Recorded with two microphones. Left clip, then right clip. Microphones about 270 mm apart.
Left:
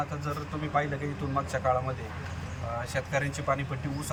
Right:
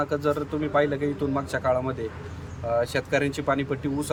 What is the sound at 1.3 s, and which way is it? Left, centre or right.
Speech, right.